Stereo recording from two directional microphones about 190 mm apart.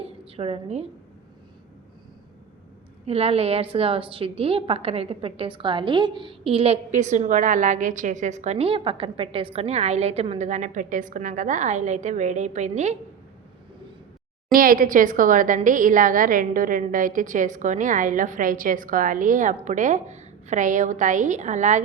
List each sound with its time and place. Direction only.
0.0 s a sound: 30° right (ahead or behind)
3.1 s a woman's voice: 30° right (ahead or behind)
14.5 s a woman's voice: 50° right (ahead or behind)